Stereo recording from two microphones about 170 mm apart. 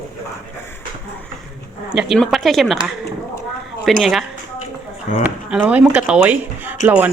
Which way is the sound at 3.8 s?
Centre (ahead or behind).